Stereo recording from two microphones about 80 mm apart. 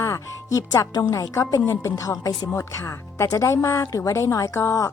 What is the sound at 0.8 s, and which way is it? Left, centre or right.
A woman's voice, left.